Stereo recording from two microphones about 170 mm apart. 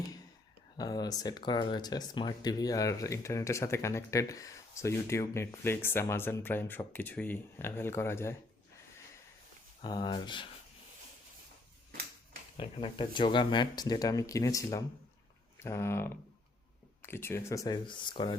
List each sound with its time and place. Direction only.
0.8 s speech: 25° left (ahead or behind)
9.8 s speech: 25° left (ahead or behind)
12.5 s speech: 30° left (ahead or behind)